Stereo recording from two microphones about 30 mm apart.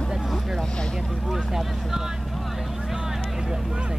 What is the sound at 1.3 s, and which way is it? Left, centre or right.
Speech, centre.